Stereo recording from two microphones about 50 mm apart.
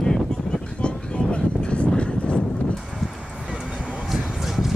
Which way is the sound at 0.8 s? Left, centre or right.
Left.